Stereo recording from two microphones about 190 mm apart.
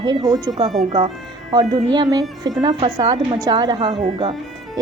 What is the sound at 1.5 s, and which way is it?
A woman's voice, 20° right (ahead or behind).